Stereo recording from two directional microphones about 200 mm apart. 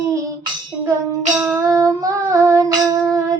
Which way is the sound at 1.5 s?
15° right (ahead or behind).